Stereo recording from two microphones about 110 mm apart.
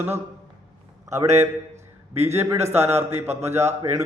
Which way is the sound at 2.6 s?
75° right (ahead or behind).